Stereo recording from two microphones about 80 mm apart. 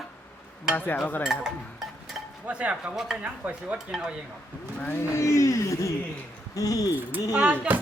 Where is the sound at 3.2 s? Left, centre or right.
Centre.